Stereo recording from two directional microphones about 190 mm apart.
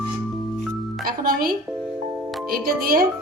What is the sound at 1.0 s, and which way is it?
Music, 50° right (ahead or behind).